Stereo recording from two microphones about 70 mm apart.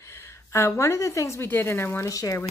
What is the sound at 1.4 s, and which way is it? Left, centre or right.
Speech, left.